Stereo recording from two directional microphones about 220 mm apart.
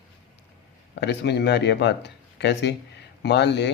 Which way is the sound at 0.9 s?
50° left (ahead or behind).